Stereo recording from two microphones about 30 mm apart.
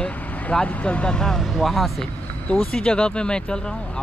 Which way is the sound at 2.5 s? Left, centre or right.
Left.